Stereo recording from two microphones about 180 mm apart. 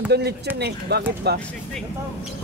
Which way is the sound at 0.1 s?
65° right (ahead or behind).